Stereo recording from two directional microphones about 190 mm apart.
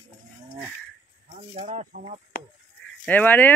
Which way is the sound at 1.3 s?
35° right (ahead or behind).